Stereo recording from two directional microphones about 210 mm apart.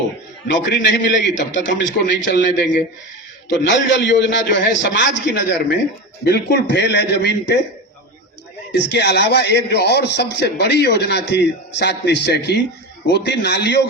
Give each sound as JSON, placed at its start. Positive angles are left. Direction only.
{"t": 0.5, "sound": "a man's voice", "side_deg": 55}
{"t": 8.9, "sound": "a man's voice", "side_deg": 55}